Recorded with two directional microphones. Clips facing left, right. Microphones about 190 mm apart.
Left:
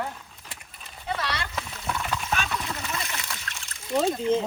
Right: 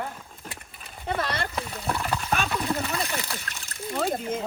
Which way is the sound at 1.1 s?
50° right (ahead or behind).